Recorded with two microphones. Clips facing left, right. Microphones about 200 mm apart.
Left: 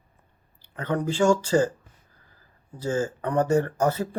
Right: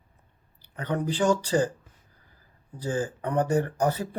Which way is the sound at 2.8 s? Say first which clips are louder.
Left 3 dB; 15° right (ahead or behind).